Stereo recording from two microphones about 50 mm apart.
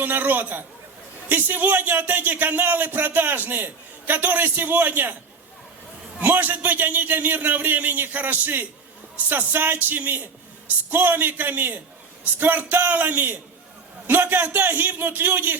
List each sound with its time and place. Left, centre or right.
0.0 s a man's voice: right
6.1 s a man's voice: right